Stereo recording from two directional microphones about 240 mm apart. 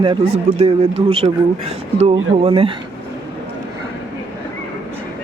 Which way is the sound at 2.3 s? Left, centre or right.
Right.